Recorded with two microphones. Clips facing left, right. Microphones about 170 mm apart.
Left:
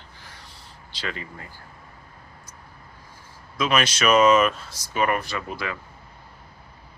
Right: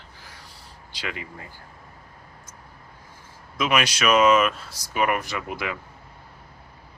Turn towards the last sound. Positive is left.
turn(degrees=-15)  # may be behind; listen again after turning